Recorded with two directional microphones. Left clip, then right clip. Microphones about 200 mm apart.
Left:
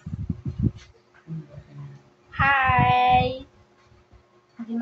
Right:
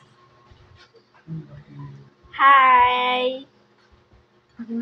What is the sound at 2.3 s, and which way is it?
Child singing, 20° left (ahead or behind).